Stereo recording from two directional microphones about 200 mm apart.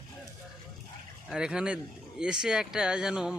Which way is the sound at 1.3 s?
5° right (ahead or behind).